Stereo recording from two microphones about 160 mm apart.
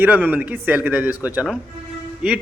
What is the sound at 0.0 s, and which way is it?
A man's voice, 10° right (ahead or behind).